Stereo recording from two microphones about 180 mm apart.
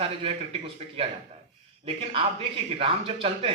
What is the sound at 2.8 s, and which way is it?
Speech, 30° right (ahead or behind).